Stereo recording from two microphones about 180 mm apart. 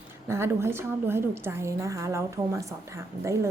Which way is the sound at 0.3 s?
15° right (ahead or behind).